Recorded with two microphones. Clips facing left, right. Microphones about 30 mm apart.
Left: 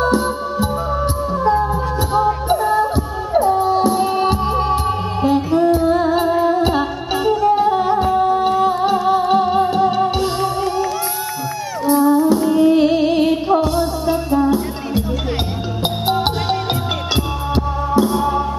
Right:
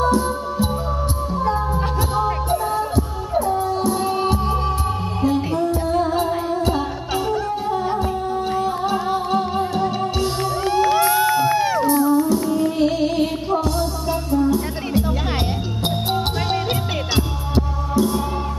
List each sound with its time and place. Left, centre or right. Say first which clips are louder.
0.0 s music: left 2 dB; left
1.5 s music: left 6 dB; left
3.3 s music: left 6 dB; left
11.0 s a sound: right 7 dB; right
11.9 s music: left 8 dB; left
17.9 s music: left 4 dB; left